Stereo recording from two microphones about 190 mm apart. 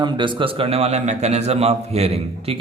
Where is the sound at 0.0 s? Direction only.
25° right (ahead or behind).